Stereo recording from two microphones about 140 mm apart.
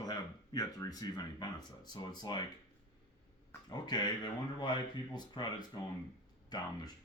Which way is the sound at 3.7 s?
30° left (ahead or behind).